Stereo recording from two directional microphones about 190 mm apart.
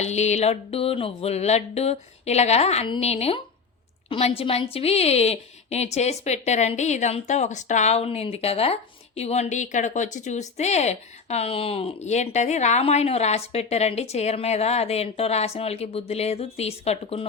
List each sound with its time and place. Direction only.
0.0 s a woman's voice: 35° left (ahead or behind)